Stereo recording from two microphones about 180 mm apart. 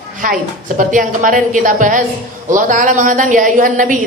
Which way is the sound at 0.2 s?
50° right (ahead or behind).